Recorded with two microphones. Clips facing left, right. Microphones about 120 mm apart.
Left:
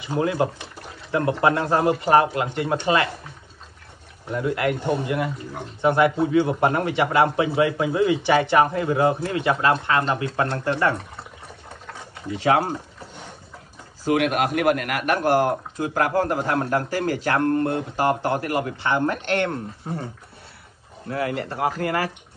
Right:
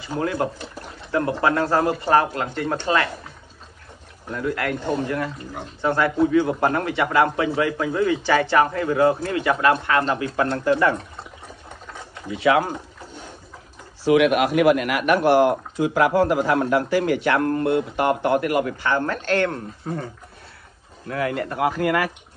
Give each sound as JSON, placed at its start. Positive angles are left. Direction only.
{"t": 0.0, "sound": "speech", "side_deg": 20}
{"t": 4.3, "sound": "speech", "side_deg": 20}
{"t": 12.4, "sound": "speech", "side_deg": 35}
{"t": 14.1, "sound": "speech", "side_deg": 45}
{"t": 17.4, "sound": "speech", "side_deg": -30}
{"t": 17.6, "sound": "speech", "side_deg": 35}
{"t": 21.1, "sound": "speech", "side_deg": 30}